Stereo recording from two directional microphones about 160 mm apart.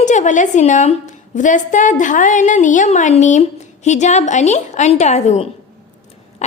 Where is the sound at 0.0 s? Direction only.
50° left (ahead or behind).